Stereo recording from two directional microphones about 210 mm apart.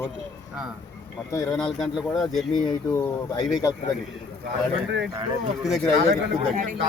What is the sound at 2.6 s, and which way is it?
Speech, 20° left (ahead or behind).